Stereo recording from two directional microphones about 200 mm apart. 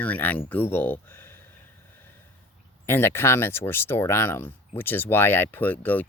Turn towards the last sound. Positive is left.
turn(degrees=10)  # may be behind; listen again after turning